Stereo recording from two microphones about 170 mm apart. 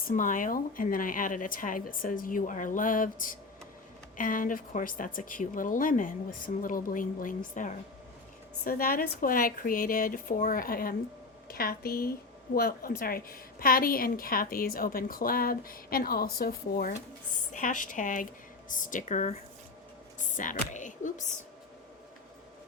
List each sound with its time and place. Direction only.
0.1 s a woman's voice: 50° left (ahead or behind)